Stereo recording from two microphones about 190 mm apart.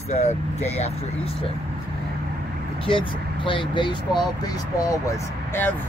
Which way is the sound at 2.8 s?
25° left (ahead or behind).